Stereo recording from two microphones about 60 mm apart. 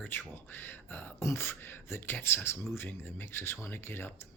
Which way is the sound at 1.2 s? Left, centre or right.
Left.